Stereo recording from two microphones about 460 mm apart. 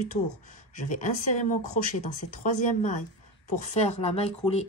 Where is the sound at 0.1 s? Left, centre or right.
Centre.